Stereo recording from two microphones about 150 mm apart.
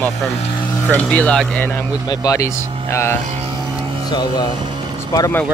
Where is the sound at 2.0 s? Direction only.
25° left (ahead or behind).